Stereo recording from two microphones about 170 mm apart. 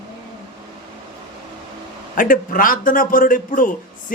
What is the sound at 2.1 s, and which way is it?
A man's voice, 55° left (ahead or behind).